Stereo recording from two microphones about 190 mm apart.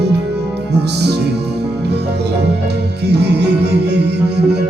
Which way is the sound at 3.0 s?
60° right (ahead or behind).